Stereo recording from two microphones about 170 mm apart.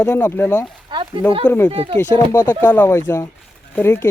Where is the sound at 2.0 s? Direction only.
10° left (ahead or behind).